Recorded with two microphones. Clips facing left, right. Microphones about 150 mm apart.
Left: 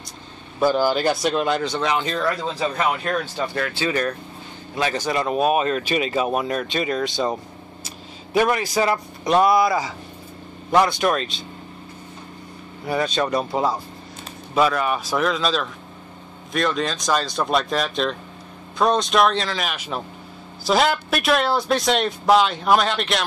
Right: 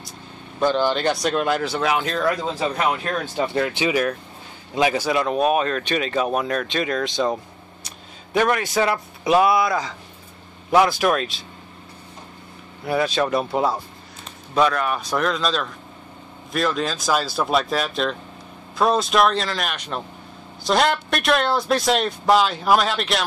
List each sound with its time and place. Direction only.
0.6 s speech: 5° left (ahead or behind)
3.3 s speech: 20° right (ahead or behind); by 11.4 s centre (ahead or behind)
12.8 s speech: centre (ahead or behind)